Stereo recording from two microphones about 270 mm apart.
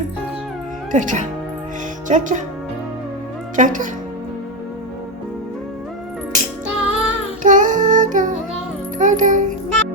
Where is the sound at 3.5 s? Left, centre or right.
Right.